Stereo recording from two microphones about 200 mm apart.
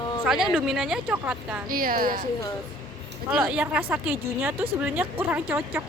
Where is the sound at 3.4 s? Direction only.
5° right (ahead or behind).